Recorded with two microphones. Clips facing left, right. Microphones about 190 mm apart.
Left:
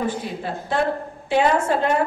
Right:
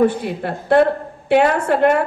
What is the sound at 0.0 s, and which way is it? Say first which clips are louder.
A woman's voice: right 8 dB; 60° right (ahead or behind).